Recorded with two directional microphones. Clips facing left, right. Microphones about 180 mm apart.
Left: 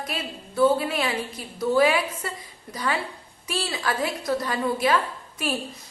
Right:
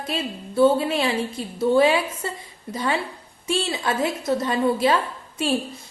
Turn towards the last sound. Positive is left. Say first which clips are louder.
# right 4 dB
turn(degrees=-25)  # may be behind; listen again after turning